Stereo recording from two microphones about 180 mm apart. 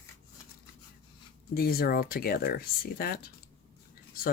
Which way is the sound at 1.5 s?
55° left (ahead or behind).